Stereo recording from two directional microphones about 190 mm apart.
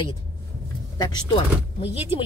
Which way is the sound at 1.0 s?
20° left (ahead or behind).